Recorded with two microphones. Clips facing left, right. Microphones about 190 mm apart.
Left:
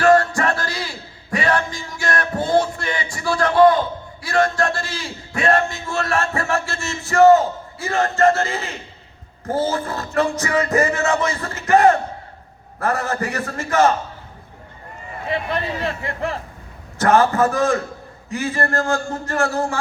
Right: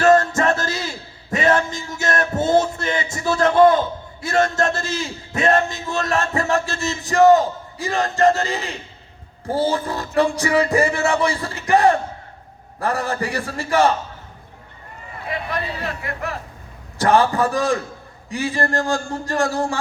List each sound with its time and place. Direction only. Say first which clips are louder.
0.0 s a sound: even; 20° right (ahead or behind)
4.2 s a man's voice: even; 25° right (ahead or behind)
15.3 s a man's voice: left 3 dB; 30° left (ahead or behind)
17.0 s speech: left 1 dB; 15° right (ahead or behind)